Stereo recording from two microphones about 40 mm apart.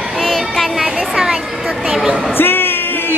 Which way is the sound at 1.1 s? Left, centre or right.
Centre.